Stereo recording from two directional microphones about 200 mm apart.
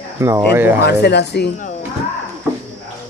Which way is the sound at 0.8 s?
55° left (ahead or behind).